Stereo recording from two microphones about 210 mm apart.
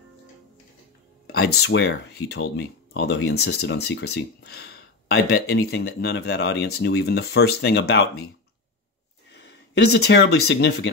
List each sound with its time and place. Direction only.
1.2 s speech: 50° left (ahead or behind)
9.3 s speech: 50° left (ahead or behind)